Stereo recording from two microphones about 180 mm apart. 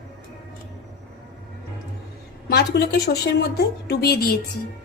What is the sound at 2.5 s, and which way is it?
A woman's voice, 65° left (ahead or behind).